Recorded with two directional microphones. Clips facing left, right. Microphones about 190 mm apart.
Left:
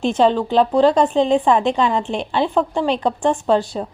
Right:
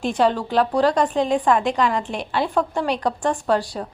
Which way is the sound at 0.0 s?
25° left (ahead or behind).